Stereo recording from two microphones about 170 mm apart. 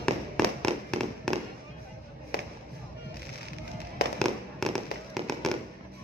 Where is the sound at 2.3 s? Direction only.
65° left (ahead or behind).